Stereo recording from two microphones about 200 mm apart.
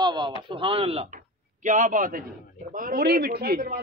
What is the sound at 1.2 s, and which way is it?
Speech, 40° right (ahead or behind).